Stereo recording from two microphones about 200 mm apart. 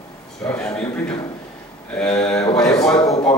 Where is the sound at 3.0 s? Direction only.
15° left (ahead or behind).